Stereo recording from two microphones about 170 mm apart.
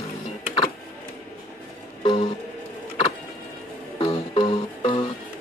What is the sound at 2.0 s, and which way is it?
Music, 30° left (ahead or behind).